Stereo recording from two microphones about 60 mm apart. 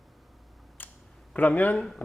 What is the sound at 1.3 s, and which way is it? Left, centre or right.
Speech, left.